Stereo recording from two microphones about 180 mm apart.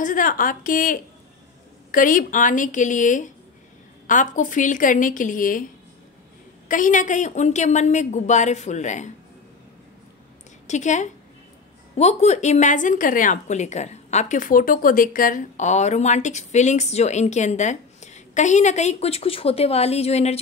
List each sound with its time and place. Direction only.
0.0 s a woman's voice: 50° left (ahead or behind)
6.7 s a woman's voice: 45° left (ahead or behind)
10.7 s a woman's voice: 40° left (ahead or behind)